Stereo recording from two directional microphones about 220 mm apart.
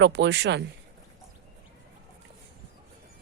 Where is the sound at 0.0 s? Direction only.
55° right (ahead or behind).